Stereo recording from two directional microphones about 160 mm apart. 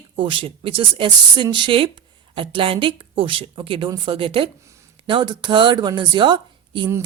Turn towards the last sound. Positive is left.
turn(degrees=-30)  # may be behind; listen again after turning